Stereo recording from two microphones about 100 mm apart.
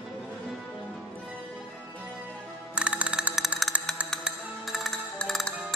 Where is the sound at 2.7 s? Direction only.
10° right (ahead or behind).